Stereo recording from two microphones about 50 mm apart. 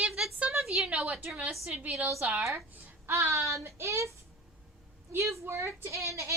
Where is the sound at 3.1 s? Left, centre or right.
Right.